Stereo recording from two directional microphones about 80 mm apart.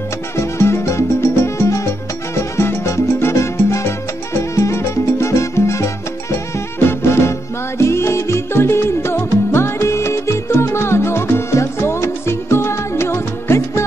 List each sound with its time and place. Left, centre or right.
0.4 s music: left
2.3 s salsa music: left
6.3 s music: left